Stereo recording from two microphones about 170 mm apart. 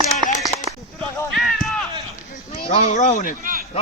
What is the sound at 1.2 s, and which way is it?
Speech, centre (ahead or behind).